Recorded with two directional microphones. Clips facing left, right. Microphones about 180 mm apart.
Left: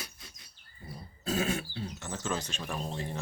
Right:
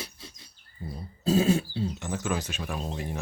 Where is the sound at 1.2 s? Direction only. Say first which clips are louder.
Right 8 dB; 30° right (ahead or behind).